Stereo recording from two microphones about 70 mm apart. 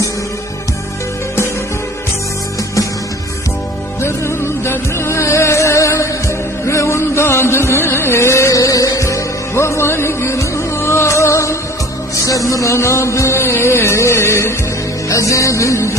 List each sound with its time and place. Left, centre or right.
4.6 s music: left
15.0 s music: left